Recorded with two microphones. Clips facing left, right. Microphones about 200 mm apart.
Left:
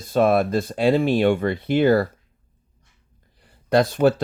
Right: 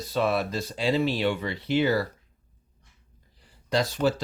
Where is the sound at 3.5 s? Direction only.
55° left (ahead or behind).